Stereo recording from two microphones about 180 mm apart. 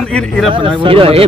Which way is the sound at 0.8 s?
30° right (ahead or behind).